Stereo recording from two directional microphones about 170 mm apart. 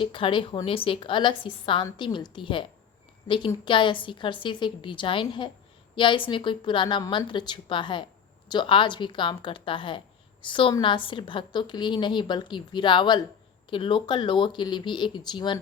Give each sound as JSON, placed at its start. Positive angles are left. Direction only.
{"t": 0.0, "sound": "a woman's voice", "side_deg": 30}